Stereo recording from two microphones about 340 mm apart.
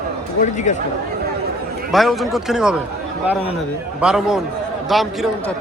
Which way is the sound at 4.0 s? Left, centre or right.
Centre.